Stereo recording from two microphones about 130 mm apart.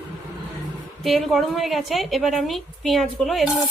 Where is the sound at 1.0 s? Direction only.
Centre (ahead or behind).